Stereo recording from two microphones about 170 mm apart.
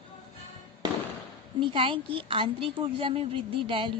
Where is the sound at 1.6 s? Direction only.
30° right (ahead or behind).